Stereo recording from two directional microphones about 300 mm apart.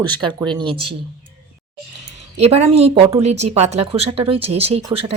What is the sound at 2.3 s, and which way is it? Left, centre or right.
Speech, right.